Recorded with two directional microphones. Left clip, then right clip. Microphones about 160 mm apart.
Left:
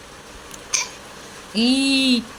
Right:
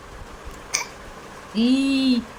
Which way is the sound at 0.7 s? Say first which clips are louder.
Left 3 dB; 60° right (ahead or behind).